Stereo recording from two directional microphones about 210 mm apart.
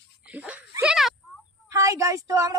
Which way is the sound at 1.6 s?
15° right (ahead or behind).